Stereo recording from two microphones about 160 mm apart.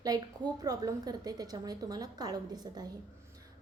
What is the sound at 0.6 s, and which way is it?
A woman's voice, 25° right (ahead or behind).